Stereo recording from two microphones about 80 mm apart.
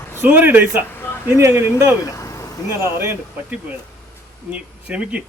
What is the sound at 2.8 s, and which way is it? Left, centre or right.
Speech, right.